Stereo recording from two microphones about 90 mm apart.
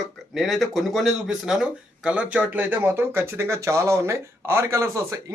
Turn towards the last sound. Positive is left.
turn(degrees=-35)  # may be behind; listen again after turning